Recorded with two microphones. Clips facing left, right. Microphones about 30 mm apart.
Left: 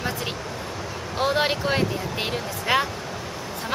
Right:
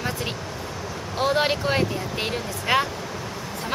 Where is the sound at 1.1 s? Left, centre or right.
Centre.